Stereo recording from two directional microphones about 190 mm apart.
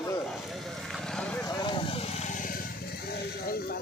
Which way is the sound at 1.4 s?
25° left (ahead or behind).